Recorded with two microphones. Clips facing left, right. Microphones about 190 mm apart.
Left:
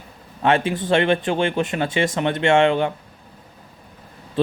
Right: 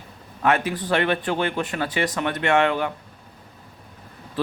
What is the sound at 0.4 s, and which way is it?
Speech, 25° left (ahead or behind).